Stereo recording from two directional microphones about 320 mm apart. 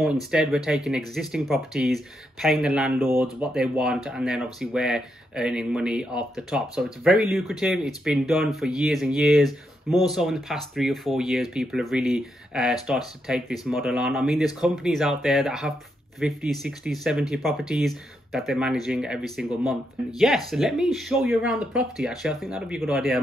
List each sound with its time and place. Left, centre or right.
0.0 s speech: centre